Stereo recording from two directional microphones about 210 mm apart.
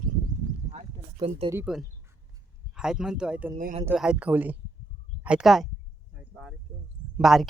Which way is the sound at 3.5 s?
35° right (ahead or behind).